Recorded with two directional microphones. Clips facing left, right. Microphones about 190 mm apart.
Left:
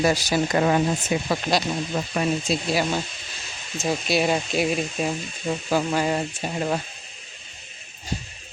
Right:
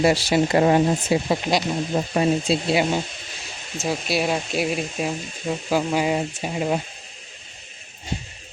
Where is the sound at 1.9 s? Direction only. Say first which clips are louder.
Right 5 dB; 25° right (ahead or behind).